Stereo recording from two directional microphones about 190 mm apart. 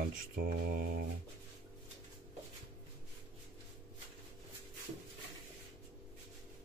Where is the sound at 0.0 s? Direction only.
50° right (ahead or behind).